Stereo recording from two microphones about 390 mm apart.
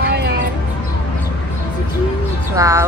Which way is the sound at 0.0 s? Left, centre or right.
Right.